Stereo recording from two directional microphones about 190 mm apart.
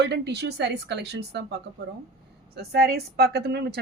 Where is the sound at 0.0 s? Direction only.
60° right (ahead or behind).